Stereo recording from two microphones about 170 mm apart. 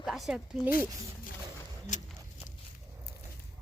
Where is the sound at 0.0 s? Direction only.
Centre (ahead or behind).